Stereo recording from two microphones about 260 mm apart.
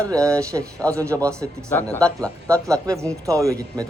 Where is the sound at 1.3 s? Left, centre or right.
Centre.